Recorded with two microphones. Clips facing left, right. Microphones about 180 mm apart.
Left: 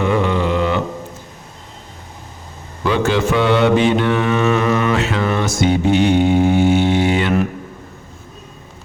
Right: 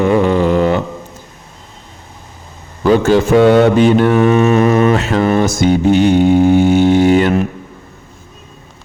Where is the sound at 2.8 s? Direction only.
40° right (ahead or behind).